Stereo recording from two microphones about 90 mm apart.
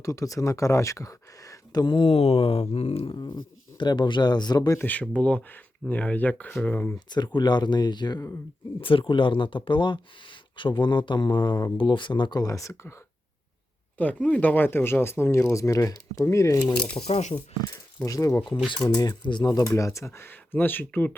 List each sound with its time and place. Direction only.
0.0 s speech: 40° left (ahead or behind)
1.8 s speech: 65° left (ahead or behind); by 3.2 s 90° left
3.2 s speech: 55° left (ahead or behind)
4.9 s speech: 15° left (ahead or behind)
6.9 s speech: 55° left (ahead or behind)
8.8 s speech: 80° left; by 12.5 s 55° left (ahead or behind)
12.5 s speech: 35° left (ahead or behind)
14.0 s speech: 15° left (ahead or behind); by 16.6 s 35° left (ahead or behind)
16.7 s speech: 10° left (ahead or behind)
18.0 s speech: 35° left (ahead or behind)
18.9 s speech: 50° left (ahead or behind); by 21.2 s 20° left (ahead or behind)